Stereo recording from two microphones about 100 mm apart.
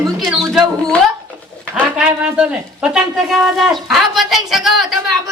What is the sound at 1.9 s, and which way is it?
A woman's voice, 10° right (ahead or behind).